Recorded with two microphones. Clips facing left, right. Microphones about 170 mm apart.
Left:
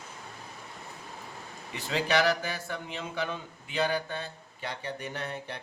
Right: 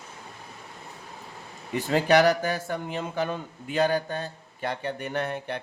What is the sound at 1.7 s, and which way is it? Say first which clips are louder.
A man's voice: right 7 dB; 50° right (ahead or behind).